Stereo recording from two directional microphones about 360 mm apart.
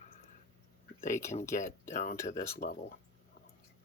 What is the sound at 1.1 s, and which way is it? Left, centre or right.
Speech, centre.